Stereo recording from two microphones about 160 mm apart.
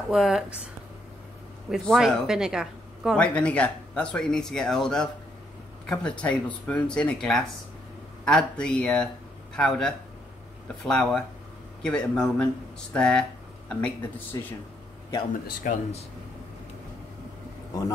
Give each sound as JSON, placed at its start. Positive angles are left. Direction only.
{"t": 0.1, "sound": "speech", "side_deg": 0}
{"t": 1.7, "sound": "speech", "side_deg": 0}
{"t": 14.3, "sound": "speech", "side_deg": 20}
{"t": 15.7, "sound": "speech", "side_deg": 55}